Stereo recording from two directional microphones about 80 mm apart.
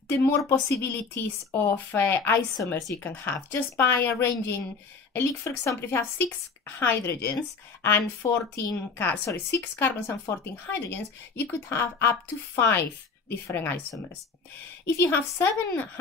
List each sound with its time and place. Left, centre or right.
0.1 s a woman's voice: left